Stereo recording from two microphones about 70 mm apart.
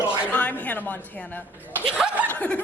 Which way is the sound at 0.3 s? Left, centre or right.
Left.